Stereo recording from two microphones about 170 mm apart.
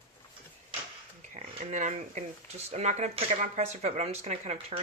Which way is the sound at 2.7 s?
40° right (ahead or behind).